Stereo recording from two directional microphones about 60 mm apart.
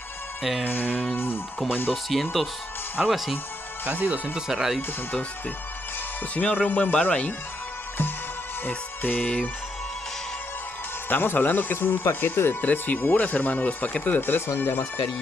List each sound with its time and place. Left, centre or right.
0.4 s music: centre
0.7 s speech: left
1.1 s music: left
1.7 s speech: left
3.0 s speech: centre
3.9 s speech: right
4.5 s speech: centre
6.3 s speech: left
8.6 s music: left
11.1 s speech: left